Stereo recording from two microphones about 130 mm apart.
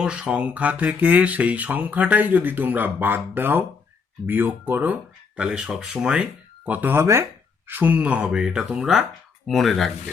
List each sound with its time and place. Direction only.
0.0 s speech: 10° right (ahead or behind)